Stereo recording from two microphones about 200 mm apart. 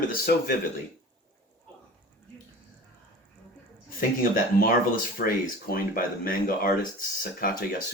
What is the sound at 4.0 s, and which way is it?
Speech, 45° left (ahead or behind).